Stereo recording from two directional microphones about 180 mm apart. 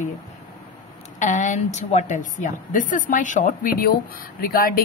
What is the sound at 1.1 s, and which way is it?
A woman's voice, 45° left (ahead or behind).